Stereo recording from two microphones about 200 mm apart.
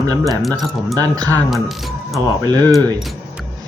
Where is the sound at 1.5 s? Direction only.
Centre (ahead or behind).